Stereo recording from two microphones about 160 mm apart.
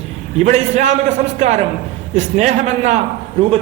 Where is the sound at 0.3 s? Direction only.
45° right (ahead or behind).